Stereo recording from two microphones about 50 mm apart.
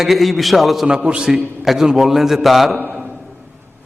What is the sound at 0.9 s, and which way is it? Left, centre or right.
A man's voice, centre.